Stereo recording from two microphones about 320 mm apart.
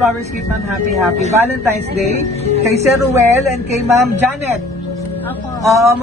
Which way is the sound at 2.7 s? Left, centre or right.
Centre.